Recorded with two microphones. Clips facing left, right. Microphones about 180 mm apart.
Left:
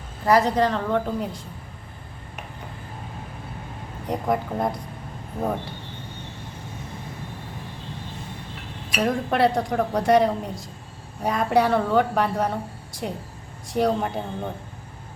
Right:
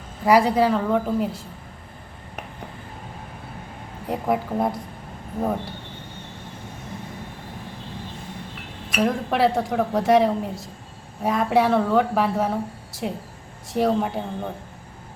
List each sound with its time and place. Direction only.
0.3 s a woman's voice: 10° right (ahead or behind)
4.1 s a woman's voice: 5° right (ahead or behind)
8.9 s a woman's voice: centre (ahead or behind)